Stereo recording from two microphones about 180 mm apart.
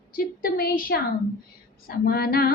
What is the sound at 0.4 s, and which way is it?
Female singing, 55° left (ahead or behind).